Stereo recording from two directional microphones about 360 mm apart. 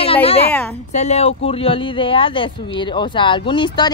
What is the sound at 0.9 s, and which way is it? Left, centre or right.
Speech, centre.